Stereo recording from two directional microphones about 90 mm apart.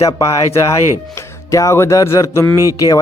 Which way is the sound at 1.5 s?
35° left (ahead or behind).